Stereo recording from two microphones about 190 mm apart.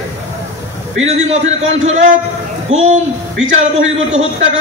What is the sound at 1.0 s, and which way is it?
Speech, 35° right (ahead or behind).